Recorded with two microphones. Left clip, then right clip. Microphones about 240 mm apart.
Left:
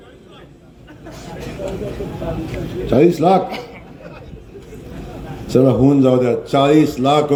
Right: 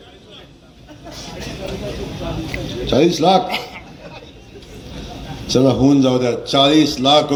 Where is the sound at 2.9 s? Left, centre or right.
Left.